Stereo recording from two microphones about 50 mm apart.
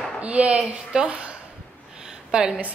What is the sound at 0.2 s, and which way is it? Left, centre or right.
A woman's voice, right.